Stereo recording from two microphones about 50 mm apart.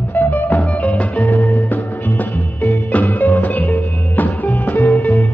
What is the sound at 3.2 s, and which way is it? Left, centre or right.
Music, left.